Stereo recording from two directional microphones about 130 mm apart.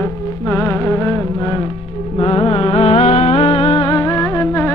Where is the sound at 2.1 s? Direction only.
50° left (ahead or behind).